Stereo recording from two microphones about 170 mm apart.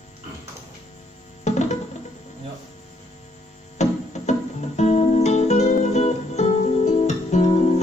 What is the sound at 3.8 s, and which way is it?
Music, 40° left (ahead or behind).